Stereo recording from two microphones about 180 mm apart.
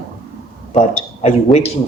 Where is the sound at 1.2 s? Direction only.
35° left (ahead or behind).